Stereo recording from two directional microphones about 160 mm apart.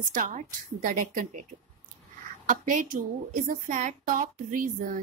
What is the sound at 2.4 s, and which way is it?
A woman's voice, 55° right (ahead or behind).